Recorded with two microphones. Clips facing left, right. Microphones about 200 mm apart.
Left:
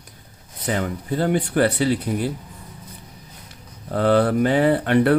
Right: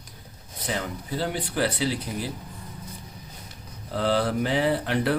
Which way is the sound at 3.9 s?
55° left (ahead or behind).